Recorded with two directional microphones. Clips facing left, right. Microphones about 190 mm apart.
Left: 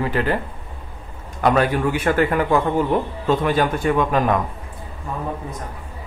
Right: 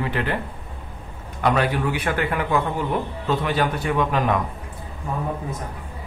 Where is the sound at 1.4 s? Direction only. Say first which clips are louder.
Left 3 dB; 45° left (ahead or behind).